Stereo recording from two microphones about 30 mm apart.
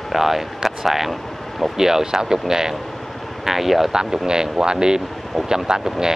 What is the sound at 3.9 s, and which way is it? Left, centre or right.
Speech, centre.